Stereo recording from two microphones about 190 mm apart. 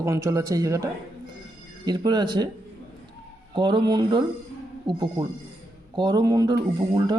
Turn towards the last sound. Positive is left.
turn(degrees=-20)  # may be behind; listen again after turning